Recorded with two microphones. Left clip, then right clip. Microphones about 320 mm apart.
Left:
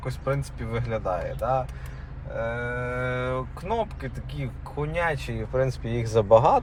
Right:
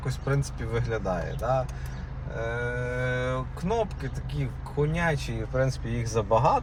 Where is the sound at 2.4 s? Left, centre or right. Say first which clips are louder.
Left 1 dB; left.